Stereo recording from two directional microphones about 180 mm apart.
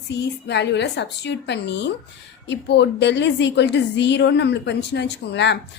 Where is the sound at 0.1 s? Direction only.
70° left (ahead or behind).